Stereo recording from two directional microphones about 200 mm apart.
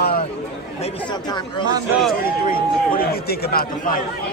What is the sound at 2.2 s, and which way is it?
Speech, 50° left (ahead or behind).